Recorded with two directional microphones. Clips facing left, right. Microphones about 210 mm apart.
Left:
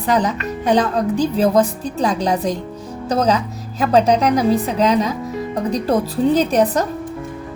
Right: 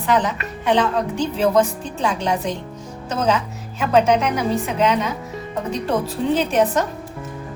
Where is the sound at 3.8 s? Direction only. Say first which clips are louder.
Left 2 dB; 35° left (ahead or behind).